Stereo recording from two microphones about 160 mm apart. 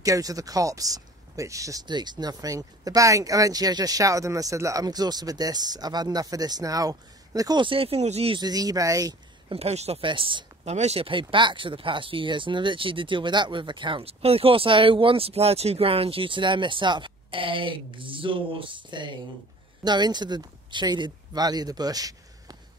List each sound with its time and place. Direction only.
0.0 s speech: 20° right (ahead or behind); by 8.4 s 40° right (ahead or behind)
8.4 s speech: 25° right (ahead or behind)
9.5 s speech: 40° right (ahead or behind); by 22.6 s 25° right (ahead or behind)